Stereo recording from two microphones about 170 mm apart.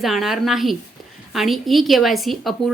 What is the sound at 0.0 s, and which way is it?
A woman's voice, centre (ahead or behind).